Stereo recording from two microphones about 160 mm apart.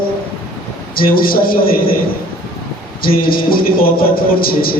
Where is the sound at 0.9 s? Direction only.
65° left (ahead or behind).